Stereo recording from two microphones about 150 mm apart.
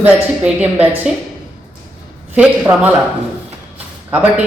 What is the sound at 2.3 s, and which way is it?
Speech, 10° right (ahead or behind).